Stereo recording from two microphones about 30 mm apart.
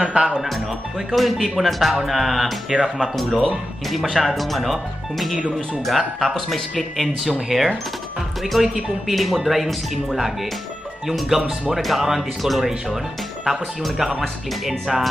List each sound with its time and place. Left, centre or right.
0.0 s speech: right
1.1 s speech: centre
14.7 s speech: centre